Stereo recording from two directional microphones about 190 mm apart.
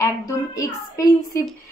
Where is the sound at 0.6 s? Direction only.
15° left (ahead or behind).